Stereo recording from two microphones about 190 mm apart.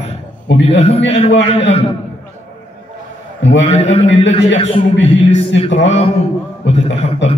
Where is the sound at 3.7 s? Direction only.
35° left (ahead or behind).